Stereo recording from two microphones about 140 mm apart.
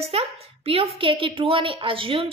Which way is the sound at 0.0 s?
45° right (ahead or behind).